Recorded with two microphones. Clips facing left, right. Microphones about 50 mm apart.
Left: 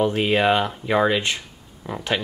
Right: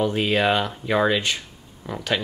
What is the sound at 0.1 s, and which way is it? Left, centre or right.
Speech, centre.